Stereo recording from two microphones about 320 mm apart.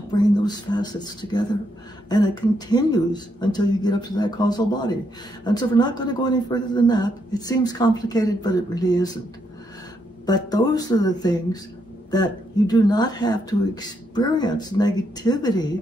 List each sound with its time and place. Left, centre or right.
0.1 s speech: centre
10.2 s speech: centre